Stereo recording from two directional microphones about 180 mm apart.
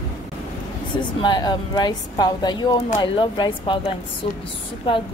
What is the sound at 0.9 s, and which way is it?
A woman's voice, 25° left (ahead or behind).